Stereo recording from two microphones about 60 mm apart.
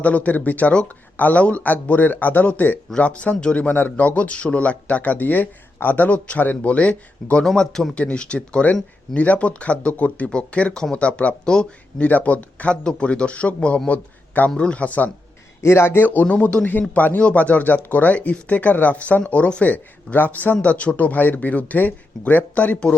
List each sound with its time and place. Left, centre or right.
0.0 s speech: left
7.4 s speech: centre
7.9 s speech: centre
12.0 s speech: left
15.6 s a man's voice: left
16.2 s speech: left